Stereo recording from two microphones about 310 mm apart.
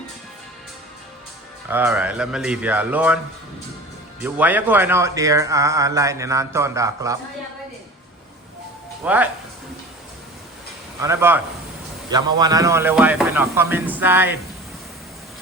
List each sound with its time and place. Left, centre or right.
1.6 s speech: centre
4.2 s speech: centre
9.0 s speech: centre
11.0 s speech: centre